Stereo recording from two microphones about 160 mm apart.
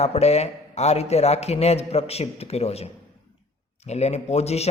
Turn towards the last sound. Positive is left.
turn(degrees=40)  # may be behind; listen again after turning